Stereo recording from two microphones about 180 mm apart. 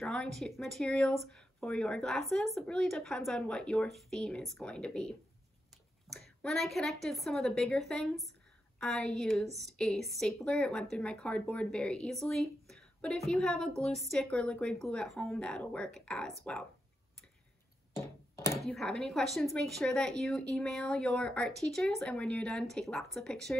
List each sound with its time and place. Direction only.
0.0 s a woman's voice: 5° left (ahead or behind)
17.9 s a sound: 15° left (ahead or behind)
18.7 s a woman's voice: 5° left (ahead or behind)